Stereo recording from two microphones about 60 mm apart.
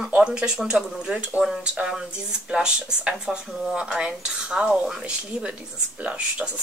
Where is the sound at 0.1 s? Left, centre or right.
Centre.